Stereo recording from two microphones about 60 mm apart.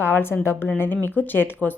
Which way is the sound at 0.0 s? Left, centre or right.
Left.